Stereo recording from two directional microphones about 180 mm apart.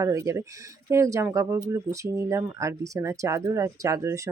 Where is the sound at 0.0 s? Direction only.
20° right (ahead or behind).